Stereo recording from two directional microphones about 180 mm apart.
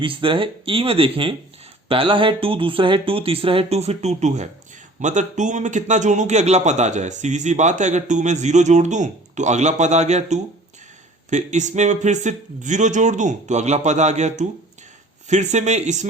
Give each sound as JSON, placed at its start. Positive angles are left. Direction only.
{"t": 0.0, "sound": "a man's voice", "side_deg": -30}